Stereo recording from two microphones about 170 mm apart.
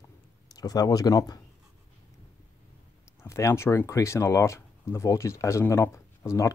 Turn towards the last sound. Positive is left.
turn(degrees=15)  # may be behind; listen again after turning